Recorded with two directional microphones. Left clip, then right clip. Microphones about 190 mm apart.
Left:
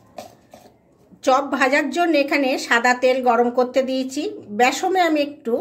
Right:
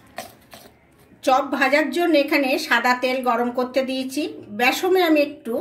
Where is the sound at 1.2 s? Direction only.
45° left (ahead or behind).